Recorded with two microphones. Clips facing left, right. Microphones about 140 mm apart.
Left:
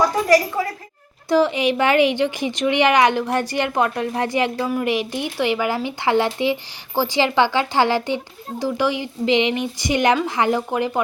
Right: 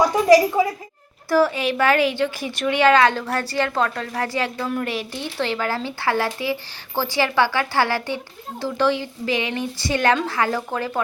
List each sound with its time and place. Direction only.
0.3 s a woman's voice: 15° right (ahead or behind)
1.3 s a woman's voice: 20° left (ahead or behind)